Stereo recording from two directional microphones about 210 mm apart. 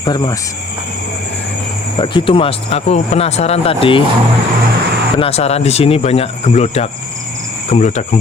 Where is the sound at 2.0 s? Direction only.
25° left (ahead or behind).